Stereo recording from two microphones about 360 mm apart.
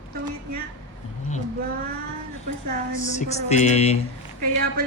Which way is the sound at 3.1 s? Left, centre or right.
Centre.